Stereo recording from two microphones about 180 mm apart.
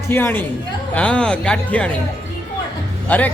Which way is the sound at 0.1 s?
10° left (ahead or behind).